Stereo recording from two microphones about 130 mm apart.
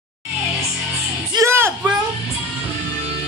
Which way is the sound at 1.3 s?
20° right (ahead or behind).